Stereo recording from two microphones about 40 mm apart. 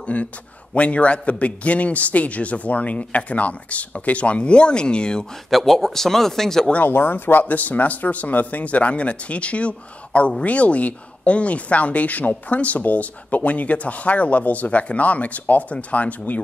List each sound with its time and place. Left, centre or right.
0.0 s speech: left
5.5 s speech: centre
6.8 s speech: left